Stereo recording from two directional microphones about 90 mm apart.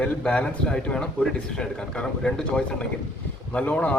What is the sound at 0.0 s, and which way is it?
Speech, 10° left (ahead or behind).